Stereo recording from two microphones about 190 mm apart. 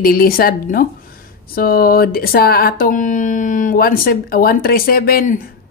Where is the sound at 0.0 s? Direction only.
50° left (ahead or behind).